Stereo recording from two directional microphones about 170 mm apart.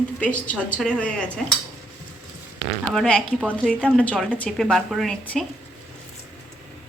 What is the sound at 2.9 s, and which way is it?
A woman's voice, 5° left (ahead or behind).